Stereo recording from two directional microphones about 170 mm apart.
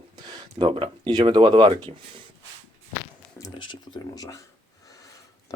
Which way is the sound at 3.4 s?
25° left (ahead or behind).